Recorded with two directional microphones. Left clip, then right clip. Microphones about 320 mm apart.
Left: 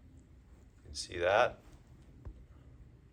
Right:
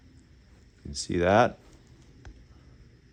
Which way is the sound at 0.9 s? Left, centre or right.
Right.